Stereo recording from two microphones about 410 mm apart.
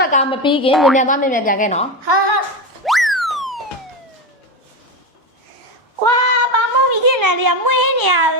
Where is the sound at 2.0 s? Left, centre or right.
Right.